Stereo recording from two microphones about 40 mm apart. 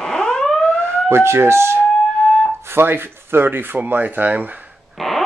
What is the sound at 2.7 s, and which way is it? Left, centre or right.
Rub, right.